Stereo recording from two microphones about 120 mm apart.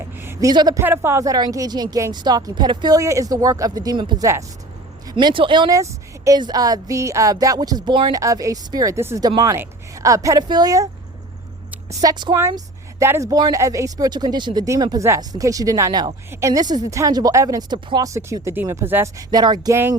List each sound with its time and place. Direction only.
0.0 s a sound: 20° right (ahead or behind)
0.3 s speech: 35° right (ahead or behind)
0.8 s speech: 20° right (ahead or behind); by 4.2 s 40° right (ahead or behind)
4.2 s speech: 25° right (ahead or behind)
5.1 s speech: 45° right (ahead or behind)
5.7 s a woman's voice: 25° right (ahead or behind)
8.2 s speech: 25° right (ahead or behind)
11.9 s speech: 30° right (ahead or behind)
12.4 s speech: 25° right (ahead or behind)
18.0 s speech: 25° right (ahead or behind)
19.3 s speech: 35° right (ahead or behind)